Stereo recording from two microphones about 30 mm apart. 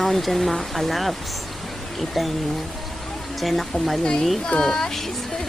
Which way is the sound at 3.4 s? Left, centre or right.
Centre.